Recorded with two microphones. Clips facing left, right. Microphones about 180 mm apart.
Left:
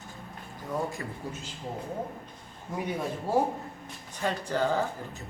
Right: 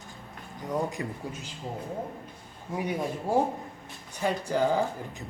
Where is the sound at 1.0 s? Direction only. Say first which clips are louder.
Right 4 dB; 20° right (ahead or behind).